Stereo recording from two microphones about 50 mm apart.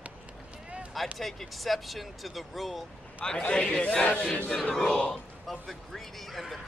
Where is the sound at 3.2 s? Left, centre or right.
Centre.